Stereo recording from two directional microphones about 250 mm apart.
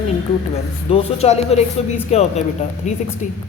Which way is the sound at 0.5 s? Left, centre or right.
Left.